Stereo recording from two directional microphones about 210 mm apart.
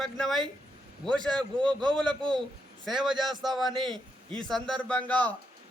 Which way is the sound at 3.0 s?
Centre (ahead or behind).